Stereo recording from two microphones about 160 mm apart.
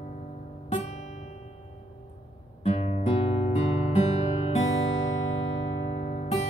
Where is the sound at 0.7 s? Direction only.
50° left (ahead or behind).